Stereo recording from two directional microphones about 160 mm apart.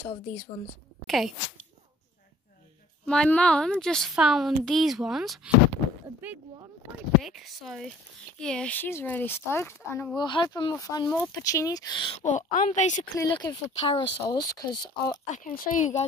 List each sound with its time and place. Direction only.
1.0 s speech: centre (ahead or behind)
3.1 s speech: 5° left (ahead or behind)
7.2 s speech: centre (ahead or behind); by 10.1 s 15° left (ahead or behind)
10.1 s speech: 30° left (ahead or behind)
12.3 s speech: 50° left (ahead or behind)
13.1 s speech: 20° left (ahead or behind)
14.2 s speech: 20° left (ahead or behind)
15.2 s speech: 50° left (ahead or behind)